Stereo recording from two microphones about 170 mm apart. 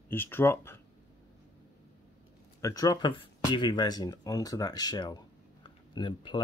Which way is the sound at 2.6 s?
20° left (ahead or behind).